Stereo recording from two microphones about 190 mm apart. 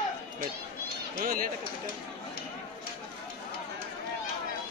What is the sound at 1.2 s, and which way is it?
Speech, 50° right (ahead or behind).